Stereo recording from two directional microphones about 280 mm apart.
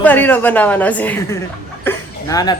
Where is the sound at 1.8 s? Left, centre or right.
Centre.